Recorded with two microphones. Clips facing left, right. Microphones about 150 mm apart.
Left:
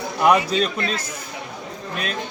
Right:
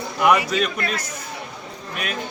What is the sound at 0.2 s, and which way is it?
Speech, 30° left (ahead or behind).